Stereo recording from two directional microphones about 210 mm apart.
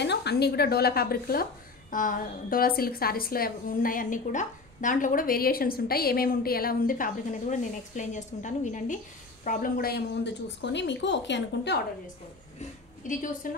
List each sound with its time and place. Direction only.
0.0 s speech: 55° left (ahead or behind)
12.5 s a woman's voice: 40° left (ahead or behind)